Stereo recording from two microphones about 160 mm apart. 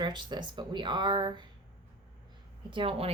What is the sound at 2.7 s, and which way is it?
Speech, 35° right (ahead or behind).